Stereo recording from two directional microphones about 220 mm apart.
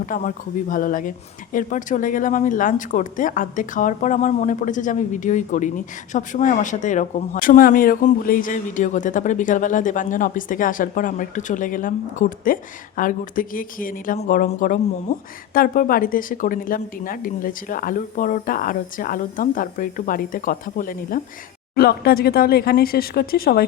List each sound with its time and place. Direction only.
0.0 s speech: 35° left (ahead or behind)